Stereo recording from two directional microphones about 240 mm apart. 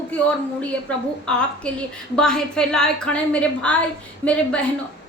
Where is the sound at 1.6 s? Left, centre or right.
Centre.